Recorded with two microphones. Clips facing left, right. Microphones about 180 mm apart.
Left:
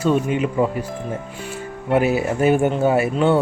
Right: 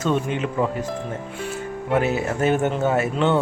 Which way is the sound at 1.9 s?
10° left (ahead or behind).